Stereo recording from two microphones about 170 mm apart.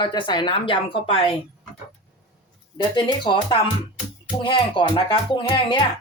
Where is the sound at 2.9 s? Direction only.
25° left (ahead or behind).